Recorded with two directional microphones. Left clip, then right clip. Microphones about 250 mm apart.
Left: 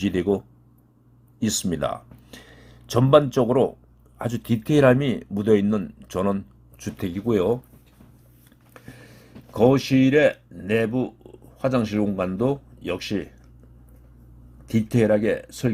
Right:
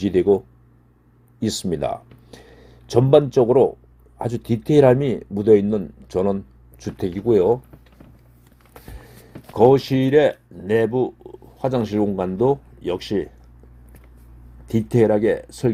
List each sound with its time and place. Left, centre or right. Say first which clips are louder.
0.0 s speech: right 6 dB; centre
9.6 s speech: right 4 dB; centre
14.7 s speech: right 3 dB; centre